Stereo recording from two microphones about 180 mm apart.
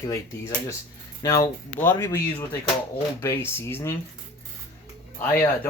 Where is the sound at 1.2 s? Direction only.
20° left (ahead or behind).